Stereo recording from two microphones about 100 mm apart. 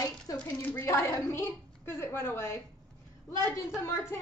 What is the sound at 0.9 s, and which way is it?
A woman's voice, 30° left (ahead or behind).